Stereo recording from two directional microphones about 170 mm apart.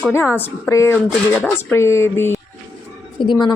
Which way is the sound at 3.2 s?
30° left (ahead or behind).